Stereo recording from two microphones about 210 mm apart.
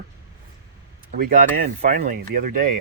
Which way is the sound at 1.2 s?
45° right (ahead or behind).